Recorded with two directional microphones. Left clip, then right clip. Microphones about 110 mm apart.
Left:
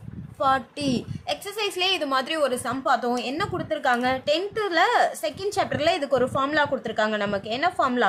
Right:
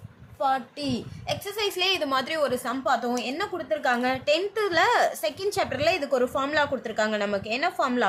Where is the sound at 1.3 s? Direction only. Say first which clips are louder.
Even; 15° left (ahead or behind).